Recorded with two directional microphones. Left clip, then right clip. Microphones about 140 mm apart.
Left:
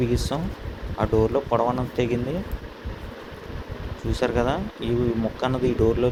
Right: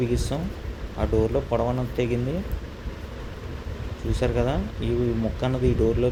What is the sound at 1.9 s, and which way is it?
Speech, centre (ahead or behind).